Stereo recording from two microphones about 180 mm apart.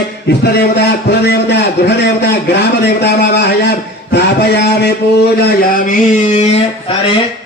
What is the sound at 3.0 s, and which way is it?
A man's voice, 70° left (ahead or behind).